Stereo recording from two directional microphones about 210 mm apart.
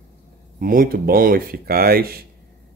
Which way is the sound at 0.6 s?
45° right (ahead or behind).